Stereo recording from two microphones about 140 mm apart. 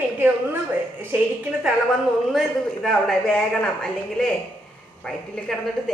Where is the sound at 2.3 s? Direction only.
Centre (ahead or behind).